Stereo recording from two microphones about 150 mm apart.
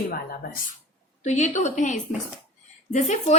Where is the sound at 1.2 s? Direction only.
50° left (ahead or behind).